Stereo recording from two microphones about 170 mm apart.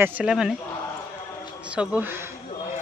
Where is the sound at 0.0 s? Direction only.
10° right (ahead or behind).